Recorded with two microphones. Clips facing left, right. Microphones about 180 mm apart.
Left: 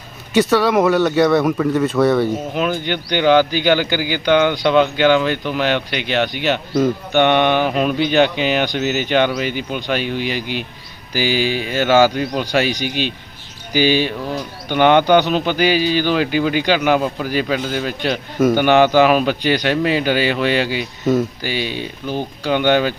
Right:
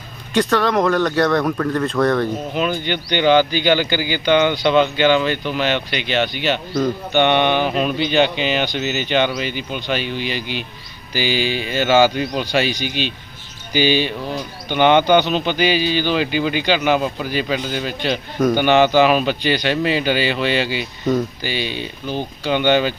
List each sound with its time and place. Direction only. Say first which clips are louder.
0.3 s a man's voice: left 3 dB; 5° left (ahead or behind)
12.6 s speech: left 2 dB; 50° left (ahead or behind)
13.7 s a man's voice: left 1 dB; 5° left (ahead or behind)